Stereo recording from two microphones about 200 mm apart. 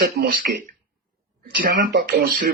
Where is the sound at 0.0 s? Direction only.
50° right (ahead or behind).